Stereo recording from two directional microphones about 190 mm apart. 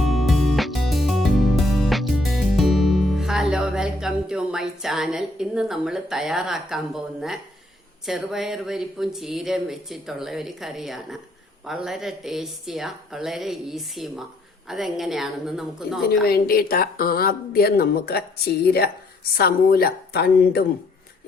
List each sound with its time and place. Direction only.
0.0 s music: centre (ahead or behind)
8.0 s speech: centre (ahead or behind)
16.2 s speech: 50° left (ahead or behind)